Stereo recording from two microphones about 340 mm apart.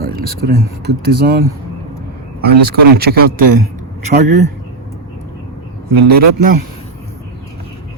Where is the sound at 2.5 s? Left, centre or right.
Right.